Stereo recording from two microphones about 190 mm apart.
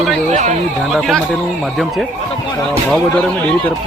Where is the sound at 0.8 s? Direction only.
Centre (ahead or behind).